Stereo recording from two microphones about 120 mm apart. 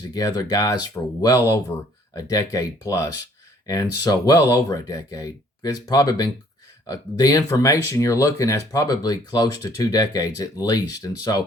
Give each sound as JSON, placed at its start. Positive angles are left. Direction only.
{"t": 0.1, "sound": "speech", "side_deg": 30}